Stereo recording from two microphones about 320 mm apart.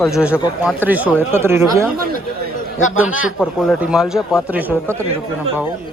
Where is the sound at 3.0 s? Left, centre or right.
Centre.